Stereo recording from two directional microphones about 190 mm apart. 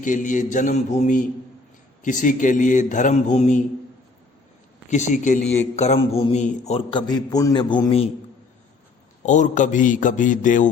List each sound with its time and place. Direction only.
0.0 s a man's voice: 40° left (ahead or behind)
4.9 s a man's voice: 40° left (ahead or behind)
9.2 s a man's voice: 40° left (ahead or behind)